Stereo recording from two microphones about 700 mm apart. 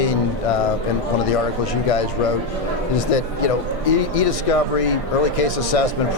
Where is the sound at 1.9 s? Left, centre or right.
Left.